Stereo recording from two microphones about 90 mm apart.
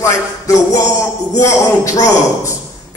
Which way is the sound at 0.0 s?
40° left (ahead or behind).